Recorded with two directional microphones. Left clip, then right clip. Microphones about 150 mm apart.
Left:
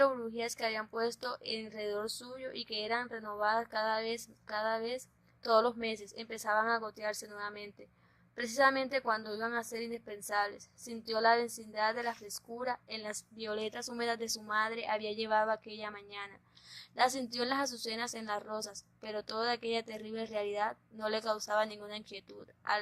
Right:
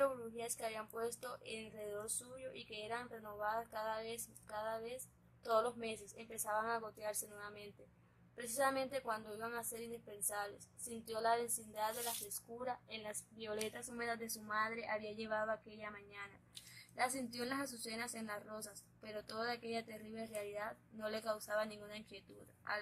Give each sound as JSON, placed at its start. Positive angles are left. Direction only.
{"t": 0.0, "sound": "a woman's voice", "side_deg": 30}